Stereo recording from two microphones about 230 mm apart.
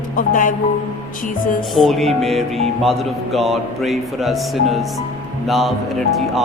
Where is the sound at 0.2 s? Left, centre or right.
Left.